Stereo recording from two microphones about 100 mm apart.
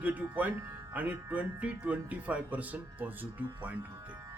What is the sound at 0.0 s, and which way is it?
Speech, 15° right (ahead or behind).